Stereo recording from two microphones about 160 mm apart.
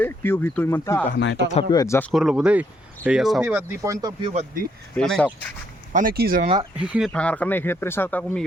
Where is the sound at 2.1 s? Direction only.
5° right (ahead or behind).